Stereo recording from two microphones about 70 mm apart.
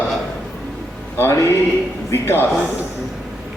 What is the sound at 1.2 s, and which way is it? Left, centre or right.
A man's voice, left.